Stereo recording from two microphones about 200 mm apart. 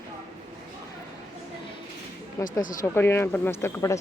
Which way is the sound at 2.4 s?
40° left (ahead or behind).